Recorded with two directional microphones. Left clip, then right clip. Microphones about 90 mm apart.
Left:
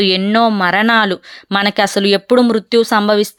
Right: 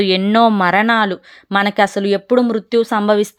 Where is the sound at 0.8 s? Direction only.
20° left (ahead or behind).